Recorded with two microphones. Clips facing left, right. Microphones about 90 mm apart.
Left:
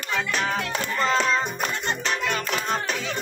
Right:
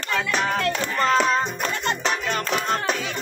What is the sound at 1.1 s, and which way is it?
Music, 15° right (ahead or behind).